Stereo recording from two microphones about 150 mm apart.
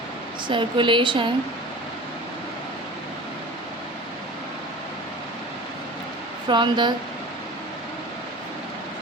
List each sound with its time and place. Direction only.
0.4 s speech: 35° right (ahead or behind)
6.5 s speech: 30° right (ahead or behind)